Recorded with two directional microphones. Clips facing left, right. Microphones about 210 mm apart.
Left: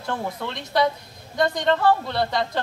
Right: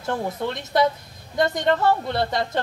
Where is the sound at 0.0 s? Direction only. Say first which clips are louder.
Right 3 dB; 20° right (ahead or behind).